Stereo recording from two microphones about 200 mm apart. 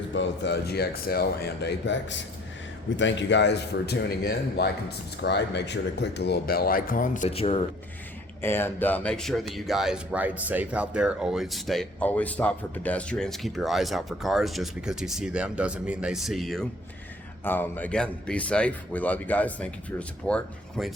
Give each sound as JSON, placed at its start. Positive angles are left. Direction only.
{"t": 0.1, "sound": "speech", "side_deg": 60}
{"t": 8.4, "sound": "speech", "side_deg": 10}